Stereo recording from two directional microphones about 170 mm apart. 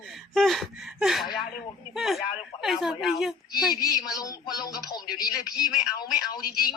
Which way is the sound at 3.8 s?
20° left (ahead or behind).